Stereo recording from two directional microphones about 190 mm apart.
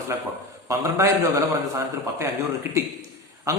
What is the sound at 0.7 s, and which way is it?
Speech, 15° right (ahead or behind).